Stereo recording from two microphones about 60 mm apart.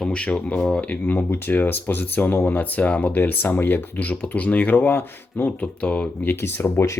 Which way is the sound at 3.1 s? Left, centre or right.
Left.